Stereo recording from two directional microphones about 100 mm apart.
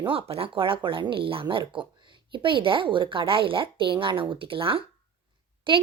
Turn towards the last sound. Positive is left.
turn(degrees=-55)  # may be behind; listen again after turning